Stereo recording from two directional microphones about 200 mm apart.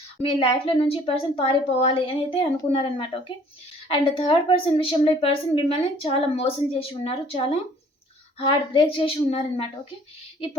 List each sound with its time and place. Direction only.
0.2 s speech: 30° left (ahead or behind)